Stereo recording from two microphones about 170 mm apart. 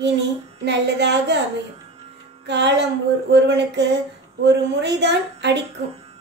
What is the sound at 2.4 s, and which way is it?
Speech, 90° right.